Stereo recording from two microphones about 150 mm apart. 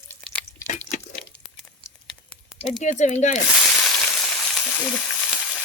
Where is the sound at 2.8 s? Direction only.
50° left (ahead or behind).